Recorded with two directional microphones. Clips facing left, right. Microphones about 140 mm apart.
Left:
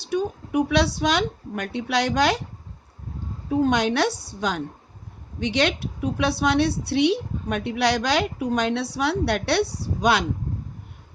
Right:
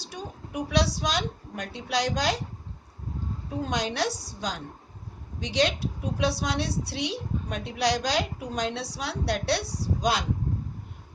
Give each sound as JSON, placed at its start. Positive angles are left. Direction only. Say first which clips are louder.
{"t": 0.0, "sound": "a woman's voice", "louder": "left 13 dB", "side_deg": 60}
{"t": 3.7, "sound": "a woman's voice", "louder": "left 3 dB", "side_deg": 65}